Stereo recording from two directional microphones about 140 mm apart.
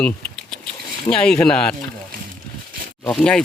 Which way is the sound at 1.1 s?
5° left (ahead or behind).